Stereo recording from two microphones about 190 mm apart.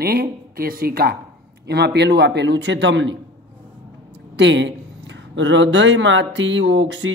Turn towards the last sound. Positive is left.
turn(degrees=-80)